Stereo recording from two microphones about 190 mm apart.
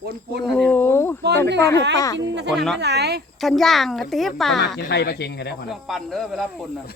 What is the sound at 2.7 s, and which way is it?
Speech, 60° right (ahead or behind).